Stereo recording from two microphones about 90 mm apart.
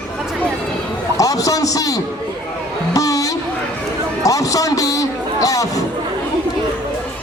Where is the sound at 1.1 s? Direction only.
40° left (ahead or behind).